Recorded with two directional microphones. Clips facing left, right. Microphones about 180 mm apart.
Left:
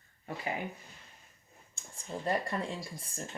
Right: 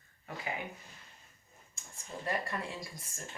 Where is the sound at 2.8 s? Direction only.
30° left (ahead or behind).